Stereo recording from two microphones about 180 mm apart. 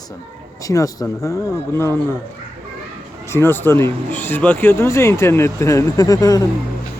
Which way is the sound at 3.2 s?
15° left (ahead or behind).